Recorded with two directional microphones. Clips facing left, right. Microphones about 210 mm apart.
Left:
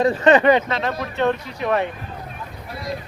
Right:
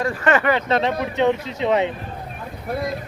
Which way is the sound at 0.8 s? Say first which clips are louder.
Right 3 dB; 20° right (ahead or behind).